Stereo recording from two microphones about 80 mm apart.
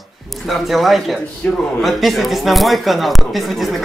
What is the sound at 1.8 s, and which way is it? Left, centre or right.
Speech, centre.